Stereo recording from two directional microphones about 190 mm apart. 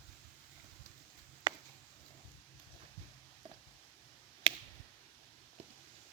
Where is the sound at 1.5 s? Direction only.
20° right (ahead or behind).